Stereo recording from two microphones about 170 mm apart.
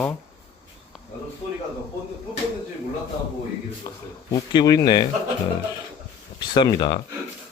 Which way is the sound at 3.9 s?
20° left (ahead or behind).